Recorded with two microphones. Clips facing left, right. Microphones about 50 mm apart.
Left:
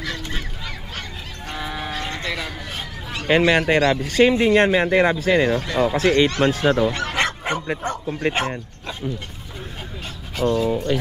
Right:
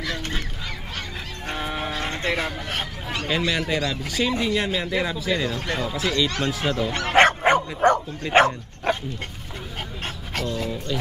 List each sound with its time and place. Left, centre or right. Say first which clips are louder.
1.5 s livestock: right 1 dB; right
2.0 s a sound: right 4 dB; right
3.3 s speech: left 8 dB; left
7.1 s bow-wow: right 6 dB; right
7.8 s speech: right 9 dB; right
8.2 s speech: right 4 dB; left
8.9 s bow-wow: right 10 dB; right
10.4 s speech: left 9 dB; left
10.9 s speech: left 5 dB; left